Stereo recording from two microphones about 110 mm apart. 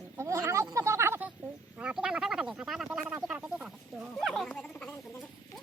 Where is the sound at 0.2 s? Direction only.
25° right (ahead or behind).